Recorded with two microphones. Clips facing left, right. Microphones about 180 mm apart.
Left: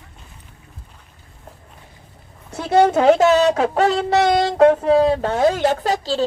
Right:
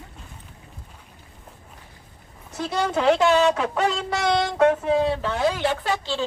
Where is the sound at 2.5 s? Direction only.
55° left (ahead or behind).